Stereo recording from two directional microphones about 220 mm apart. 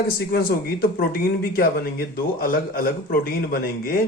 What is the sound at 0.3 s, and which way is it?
Speech, 45° left (ahead or behind).